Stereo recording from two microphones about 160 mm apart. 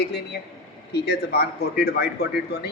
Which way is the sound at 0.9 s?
90° left.